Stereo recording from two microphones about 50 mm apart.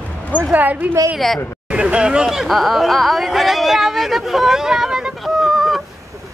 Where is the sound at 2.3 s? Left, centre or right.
Centre.